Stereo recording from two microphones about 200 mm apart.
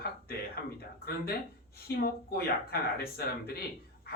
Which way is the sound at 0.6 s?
50° left (ahead or behind).